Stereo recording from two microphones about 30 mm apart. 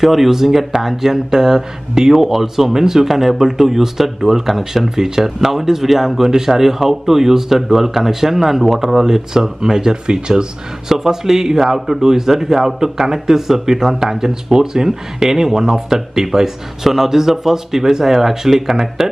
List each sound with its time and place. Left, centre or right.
0.0 s speech: centre; by 10.4 s right
10.9 s speech: centre